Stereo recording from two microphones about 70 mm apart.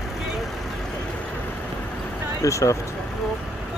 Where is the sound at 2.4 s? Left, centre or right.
Left.